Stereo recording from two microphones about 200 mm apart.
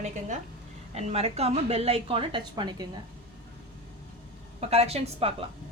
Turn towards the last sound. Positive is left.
turn(degrees=-30)  # may be behind; listen again after turning